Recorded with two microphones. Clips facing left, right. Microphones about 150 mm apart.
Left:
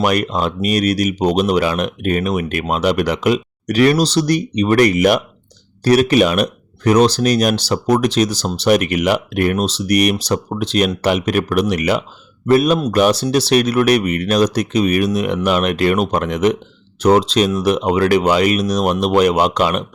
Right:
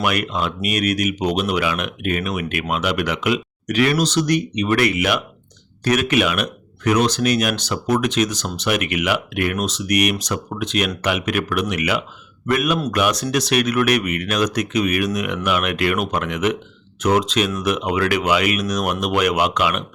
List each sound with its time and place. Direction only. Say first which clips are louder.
0.0 s speech: left 5 dB; 40° left (ahead or behind)